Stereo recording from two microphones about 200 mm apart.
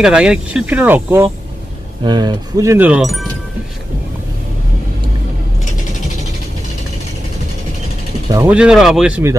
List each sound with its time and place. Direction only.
0.0 s speech: 5° right (ahead or behind)
2.0 s speech: 20° right (ahead or behind); by 3.3 s centre (ahead or behind)
8.3 s speech: 15° right (ahead or behind)
8.5 s speech: 5° right (ahead or behind)